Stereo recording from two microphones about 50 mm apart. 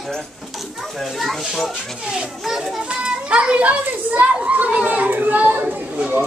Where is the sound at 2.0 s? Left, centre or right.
Centre.